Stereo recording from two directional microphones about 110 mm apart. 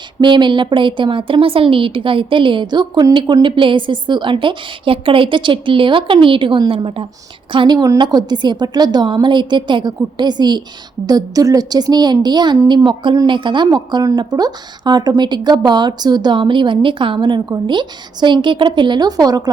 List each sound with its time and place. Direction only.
0.2 s a woman's voice: 45° right (ahead or behind)